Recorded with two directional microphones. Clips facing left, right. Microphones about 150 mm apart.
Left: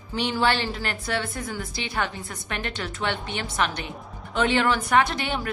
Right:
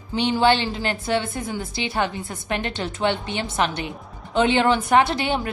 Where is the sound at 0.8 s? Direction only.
25° right (ahead or behind).